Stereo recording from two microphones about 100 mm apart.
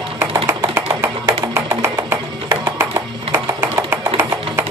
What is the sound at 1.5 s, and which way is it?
Music, 25° right (ahead or behind).